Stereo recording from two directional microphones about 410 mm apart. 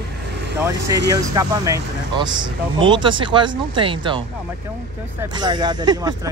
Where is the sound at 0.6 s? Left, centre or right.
Centre.